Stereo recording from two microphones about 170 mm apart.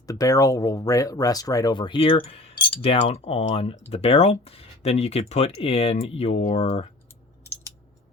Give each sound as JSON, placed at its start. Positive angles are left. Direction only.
{"t": 0.1, "sound": "speech", "side_deg": 20}